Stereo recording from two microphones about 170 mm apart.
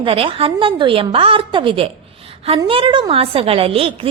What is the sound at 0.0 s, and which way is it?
A woman's voice, 30° right (ahead or behind).